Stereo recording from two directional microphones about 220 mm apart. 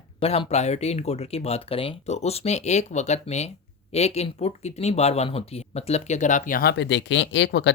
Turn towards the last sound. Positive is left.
turn(degrees=55)  # may be behind; listen again after turning